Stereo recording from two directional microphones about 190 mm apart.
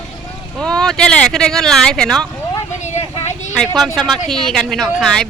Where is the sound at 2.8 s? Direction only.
35° left (ahead or behind).